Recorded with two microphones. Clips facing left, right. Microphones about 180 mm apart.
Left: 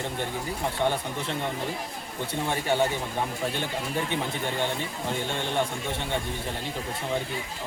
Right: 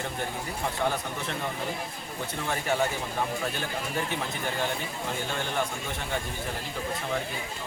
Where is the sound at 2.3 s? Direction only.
30° left (ahead or behind).